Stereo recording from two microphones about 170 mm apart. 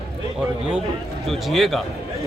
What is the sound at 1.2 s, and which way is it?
Speech, centre (ahead or behind).